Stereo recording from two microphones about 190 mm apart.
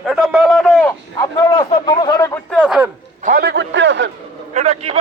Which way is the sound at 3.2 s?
50° right (ahead or behind).